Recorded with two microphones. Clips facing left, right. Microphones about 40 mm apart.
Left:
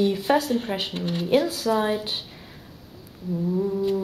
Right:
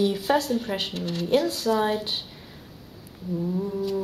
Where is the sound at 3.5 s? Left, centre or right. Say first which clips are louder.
Left 7 dB; centre.